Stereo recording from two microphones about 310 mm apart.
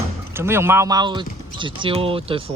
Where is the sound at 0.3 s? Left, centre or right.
Centre.